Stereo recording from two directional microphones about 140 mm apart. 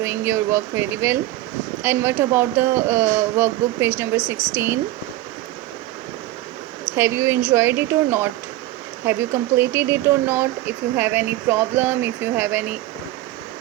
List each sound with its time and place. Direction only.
0.0 s speech: 20° right (ahead or behind)
6.8 s speech: 20° right (ahead or behind)